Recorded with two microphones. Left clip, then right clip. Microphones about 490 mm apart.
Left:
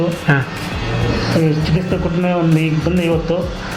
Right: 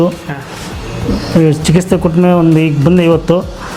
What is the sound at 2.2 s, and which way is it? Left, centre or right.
Speech, right.